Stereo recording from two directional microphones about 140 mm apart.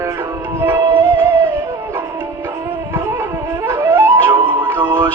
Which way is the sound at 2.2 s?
20° right (ahead or behind).